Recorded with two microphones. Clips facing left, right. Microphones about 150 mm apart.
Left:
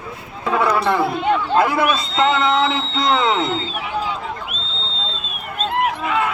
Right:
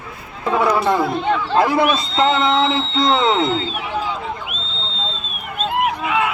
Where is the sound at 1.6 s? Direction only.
20° right (ahead or behind).